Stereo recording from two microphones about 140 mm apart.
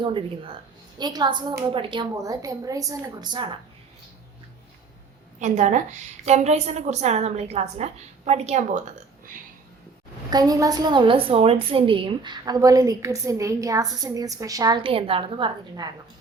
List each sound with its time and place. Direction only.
0.0 s a woman's voice: 40° right (ahead or behind)
2.1 s a woman's voice: 25° right (ahead or behind)
5.4 s a woman's voice: 60° right (ahead or behind)
10.2 s a woman's voice: 25° right (ahead or behind)